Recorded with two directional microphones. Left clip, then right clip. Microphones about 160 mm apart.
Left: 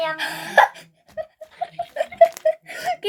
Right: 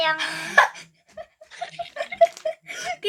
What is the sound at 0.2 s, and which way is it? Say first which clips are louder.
Music: left 2 dB; 15° right (ahead or behind).